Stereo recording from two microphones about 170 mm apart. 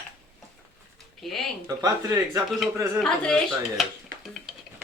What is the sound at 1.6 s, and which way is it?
Speech, 20° right (ahead or behind).